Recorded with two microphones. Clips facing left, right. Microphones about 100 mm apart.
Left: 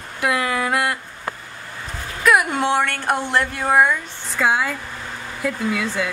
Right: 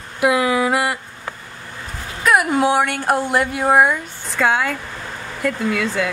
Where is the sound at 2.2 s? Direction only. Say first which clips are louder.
Right 2 dB; 5° right (ahead or behind).